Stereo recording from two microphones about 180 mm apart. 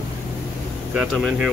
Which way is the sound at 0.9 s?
5° right (ahead or behind).